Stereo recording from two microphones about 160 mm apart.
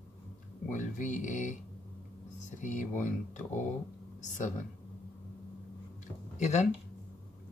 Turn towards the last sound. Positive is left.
turn(degrees=45)  # may be behind; listen again after turning